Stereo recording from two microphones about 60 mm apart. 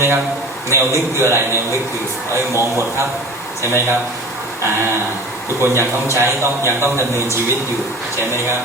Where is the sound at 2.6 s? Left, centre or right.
Right.